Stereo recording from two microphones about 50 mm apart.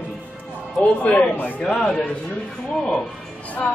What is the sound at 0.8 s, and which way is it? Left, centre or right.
Speech, left.